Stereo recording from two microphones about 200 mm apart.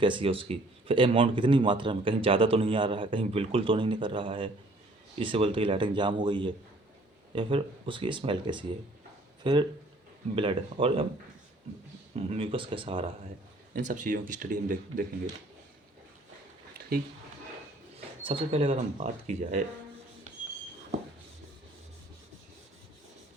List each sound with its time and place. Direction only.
0.0 s speech: 25° right (ahead or behind)
12.1 s speech: 30° right (ahead or behind)
13.7 s speech: 40° right (ahead or behind)
18.0 s speech: 25° right (ahead or behind)